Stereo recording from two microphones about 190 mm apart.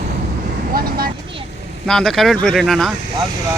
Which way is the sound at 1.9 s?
Centre (ahead or behind).